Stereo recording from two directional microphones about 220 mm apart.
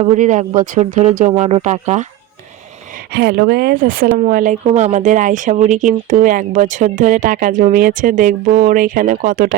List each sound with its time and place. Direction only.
0.0 s speech: 30° right (ahead or behind)
3.1 s speech: 45° right (ahead or behind)